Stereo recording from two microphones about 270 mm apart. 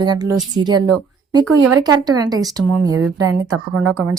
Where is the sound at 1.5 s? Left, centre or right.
Right.